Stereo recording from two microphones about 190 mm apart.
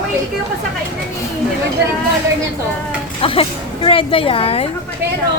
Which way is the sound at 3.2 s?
30° left (ahead or behind).